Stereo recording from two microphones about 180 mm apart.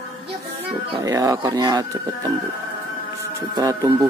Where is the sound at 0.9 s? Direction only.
20° right (ahead or behind).